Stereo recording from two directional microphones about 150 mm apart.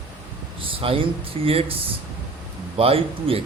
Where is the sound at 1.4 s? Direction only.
40° right (ahead or behind).